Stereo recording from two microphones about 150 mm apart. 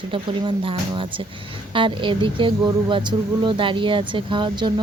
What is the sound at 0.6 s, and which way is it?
Speech, 35° right (ahead or behind).